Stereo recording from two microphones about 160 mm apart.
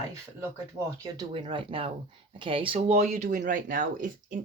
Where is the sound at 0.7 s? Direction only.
20° right (ahead or behind).